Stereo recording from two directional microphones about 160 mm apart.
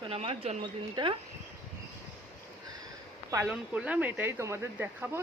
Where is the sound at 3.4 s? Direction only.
5° right (ahead or behind).